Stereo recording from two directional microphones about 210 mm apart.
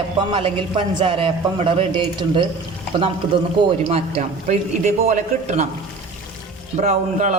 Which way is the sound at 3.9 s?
30° right (ahead or behind).